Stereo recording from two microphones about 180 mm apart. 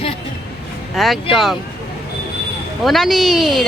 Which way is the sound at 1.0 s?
Centre (ahead or behind).